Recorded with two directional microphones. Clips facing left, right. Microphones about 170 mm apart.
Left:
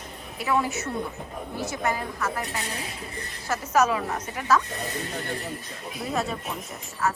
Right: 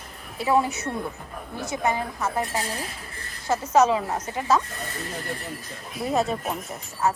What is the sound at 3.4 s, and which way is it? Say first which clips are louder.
A woman's voice: right 3 dB; 20° right (ahead or behind).